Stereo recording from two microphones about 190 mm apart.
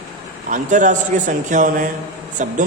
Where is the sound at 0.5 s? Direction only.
40° right (ahead or behind).